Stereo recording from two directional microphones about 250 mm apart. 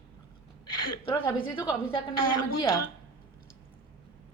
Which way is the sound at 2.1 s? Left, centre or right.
Left.